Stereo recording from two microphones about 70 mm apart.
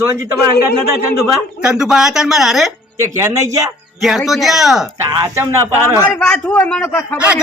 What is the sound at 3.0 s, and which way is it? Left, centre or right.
Speech, right.